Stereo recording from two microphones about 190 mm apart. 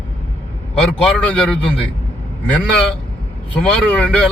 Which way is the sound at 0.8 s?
5° left (ahead or behind).